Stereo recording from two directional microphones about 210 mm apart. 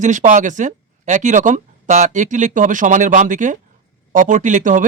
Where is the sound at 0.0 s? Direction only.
35° right (ahead or behind).